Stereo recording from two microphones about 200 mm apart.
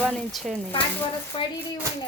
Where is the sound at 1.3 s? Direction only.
25° left (ahead or behind).